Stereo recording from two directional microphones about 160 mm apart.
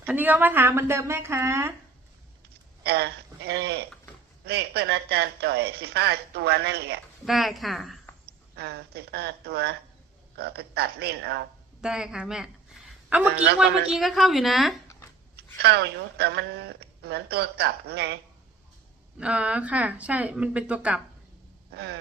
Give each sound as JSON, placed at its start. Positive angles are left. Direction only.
{"t": 0.0, "sound": "speech", "side_deg": -10}
{"t": 2.8, "sound": "speech", "side_deg": -90}
{"t": 7.3, "sound": "speech", "side_deg": 0}
{"t": 8.3, "sound": "speech", "side_deg": -90}
{"t": 11.8, "sound": "speech", "side_deg": -5}
{"t": 15.6, "sound": "speech", "side_deg": -90}
{"t": 19.2, "sound": "speech", "side_deg": -10}
{"t": 21.7, "sound": "speech", "side_deg": -90}